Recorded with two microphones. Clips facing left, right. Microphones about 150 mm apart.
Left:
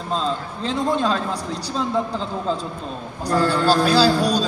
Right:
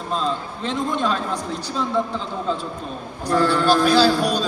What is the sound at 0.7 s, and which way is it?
Speech, 35° left (ahead or behind).